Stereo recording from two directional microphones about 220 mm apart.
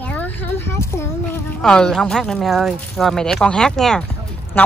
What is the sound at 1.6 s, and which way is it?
Speech, centre (ahead or behind).